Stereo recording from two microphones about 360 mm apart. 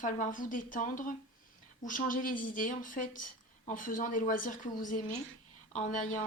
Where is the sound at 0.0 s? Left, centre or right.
Left.